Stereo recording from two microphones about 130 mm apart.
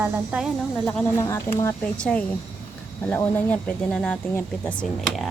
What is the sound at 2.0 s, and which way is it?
Speech, 10° left (ahead or behind).